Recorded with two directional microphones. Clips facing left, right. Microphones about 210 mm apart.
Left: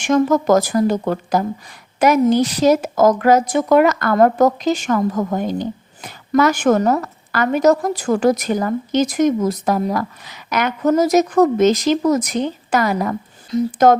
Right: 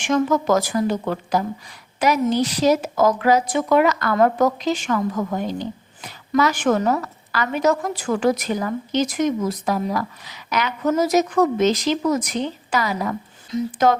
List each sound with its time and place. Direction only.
0.0 s a woman's voice: 45° left (ahead or behind)